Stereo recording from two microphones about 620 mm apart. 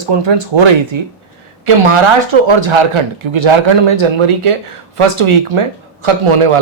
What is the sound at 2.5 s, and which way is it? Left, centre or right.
Speech, right.